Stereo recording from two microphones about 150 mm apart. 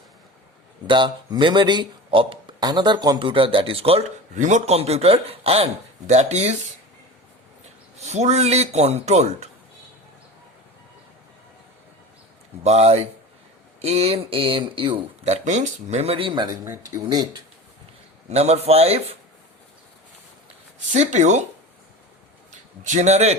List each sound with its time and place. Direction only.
0.9 s speech: 30° right (ahead or behind); by 6.6 s 45° right (ahead or behind)
7.9 s a man's voice: 45° right (ahead or behind)
12.6 s a man's voice: 45° right (ahead or behind); by 17.4 s 25° right (ahead or behind)
18.3 s a man's voice: 45° right (ahead or behind)
20.9 s a man's voice: 50° right (ahead or behind)
22.8 s a man's voice: 55° right (ahead or behind)